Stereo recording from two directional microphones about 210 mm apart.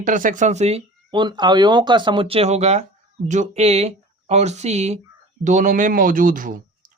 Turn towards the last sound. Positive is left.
turn(degrees=-40)  # may be behind; listen again after turning